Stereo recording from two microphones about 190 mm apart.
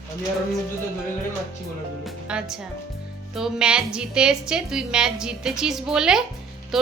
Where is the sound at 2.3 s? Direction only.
5° right (ahead or behind).